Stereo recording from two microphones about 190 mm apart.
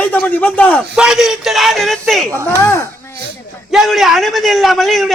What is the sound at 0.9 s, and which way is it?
A man's voice, 5° right (ahead or behind).